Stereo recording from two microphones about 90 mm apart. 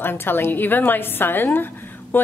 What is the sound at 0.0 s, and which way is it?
A woman's voice, 25° left (ahead or behind).